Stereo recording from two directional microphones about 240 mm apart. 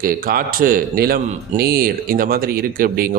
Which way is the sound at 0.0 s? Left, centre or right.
Right.